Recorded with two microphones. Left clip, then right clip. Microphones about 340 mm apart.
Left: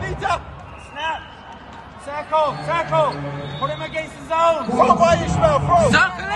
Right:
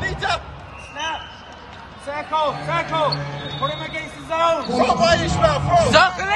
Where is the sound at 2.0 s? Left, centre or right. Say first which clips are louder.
Left 2 dB; left.